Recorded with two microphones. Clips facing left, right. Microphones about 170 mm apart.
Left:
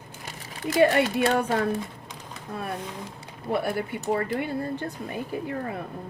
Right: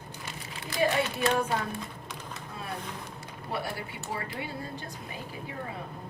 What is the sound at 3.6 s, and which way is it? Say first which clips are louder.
Speech: left 8 dB; 55° left (ahead or behind).